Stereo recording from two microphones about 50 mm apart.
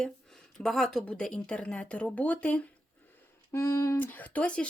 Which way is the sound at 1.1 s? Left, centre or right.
Centre.